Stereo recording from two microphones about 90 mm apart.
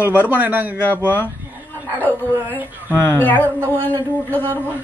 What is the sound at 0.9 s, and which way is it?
Speech, 20° left (ahead or behind).